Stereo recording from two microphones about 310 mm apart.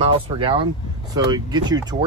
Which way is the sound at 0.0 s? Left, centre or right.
Centre.